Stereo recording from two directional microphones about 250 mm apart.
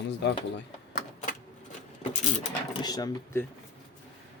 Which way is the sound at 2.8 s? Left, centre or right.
Centre.